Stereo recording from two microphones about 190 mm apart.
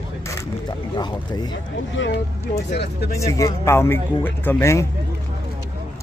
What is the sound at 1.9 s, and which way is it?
Speech, 70° left (ahead or behind).